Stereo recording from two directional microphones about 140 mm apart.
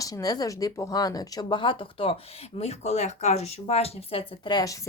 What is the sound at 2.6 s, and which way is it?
Speech, 50° left (ahead or behind).